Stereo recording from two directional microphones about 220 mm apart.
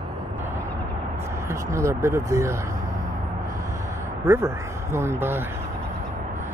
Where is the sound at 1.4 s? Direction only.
15° right (ahead or behind).